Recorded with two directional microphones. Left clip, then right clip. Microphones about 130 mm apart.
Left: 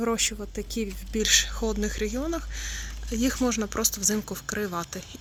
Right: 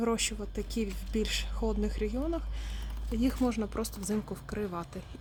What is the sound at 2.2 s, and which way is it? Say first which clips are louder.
Speech: left 4 dB; 25° left (ahead or behind).